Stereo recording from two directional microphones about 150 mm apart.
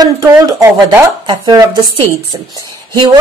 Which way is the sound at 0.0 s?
25° right (ahead or behind).